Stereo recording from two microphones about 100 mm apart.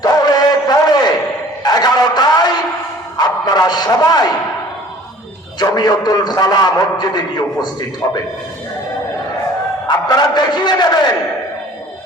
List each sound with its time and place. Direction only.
0.0 s chant: 40° left (ahead or behind)
1.6 s a sound: 40° left (ahead or behind)
5.5 s a man's voice: 45° left (ahead or behind)
9.8 s a man's voice: 45° left (ahead or behind)